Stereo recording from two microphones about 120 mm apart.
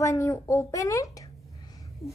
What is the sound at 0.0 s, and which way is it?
A child's voice, 25° left (ahead or behind).